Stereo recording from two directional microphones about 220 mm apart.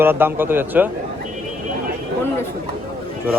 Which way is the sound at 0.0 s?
10° right (ahead or behind).